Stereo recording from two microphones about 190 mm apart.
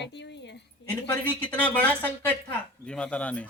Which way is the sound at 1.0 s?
10° left (ahead or behind).